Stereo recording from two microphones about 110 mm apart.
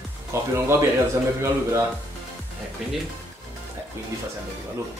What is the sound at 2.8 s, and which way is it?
Speech, centre (ahead or behind).